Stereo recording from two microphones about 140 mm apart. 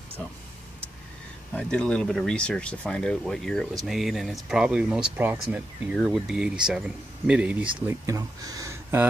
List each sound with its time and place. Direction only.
1.5 s speech: 5° left (ahead or behind); by 7.7 s 10° right (ahead or behind)
7.8 s speech: 25° right (ahead or behind)